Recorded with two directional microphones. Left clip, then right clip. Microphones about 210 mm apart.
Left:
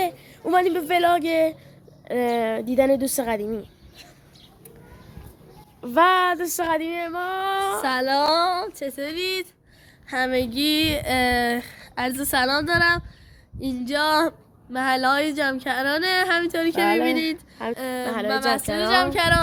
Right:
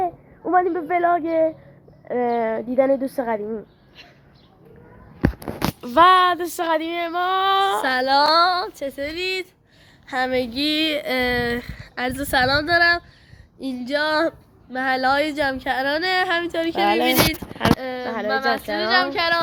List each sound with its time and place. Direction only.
0.0 s a woman's voice: 35° left (ahead or behind)
5.8 s speech: centre (ahead or behind); by 7.8 s 20° right (ahead or behind)
7.8 s speech: 10° left (ahead or behind); by 16.8 s 30° left (ahead or behind)
17.7 s speech: 50° left (ahead or behind)
18.0 s speech: 25° left (ahead or behind)
18.7 s female singing: 55° left (ahead or behind)